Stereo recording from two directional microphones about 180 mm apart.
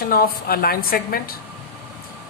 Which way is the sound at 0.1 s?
55° left (ahead or behind).